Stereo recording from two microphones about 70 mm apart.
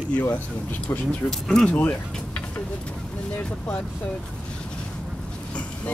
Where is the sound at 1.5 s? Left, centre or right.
Centre.